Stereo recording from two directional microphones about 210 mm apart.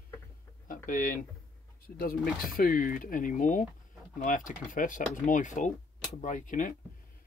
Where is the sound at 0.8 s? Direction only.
40° left (ahead or behind).